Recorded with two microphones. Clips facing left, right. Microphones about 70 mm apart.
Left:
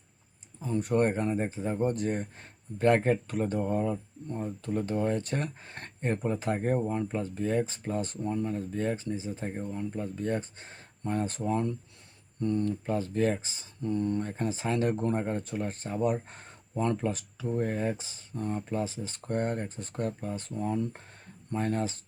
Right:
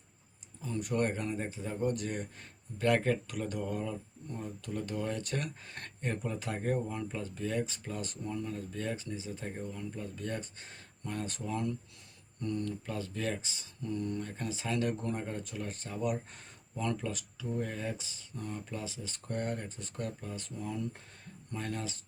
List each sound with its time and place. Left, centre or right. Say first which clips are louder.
0.6 s speech: left 6 dB; left